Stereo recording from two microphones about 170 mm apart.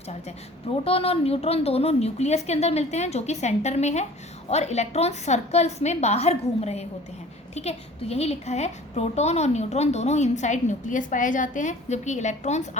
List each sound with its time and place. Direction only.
0.9 s a woman's voice: 35° left (ahead or behind)